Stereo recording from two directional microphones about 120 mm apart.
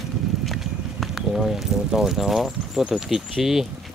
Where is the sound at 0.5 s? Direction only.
Centre (ahead or behind).